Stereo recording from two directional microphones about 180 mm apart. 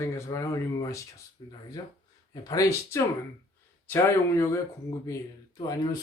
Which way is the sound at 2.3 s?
20° left (ahead or behind).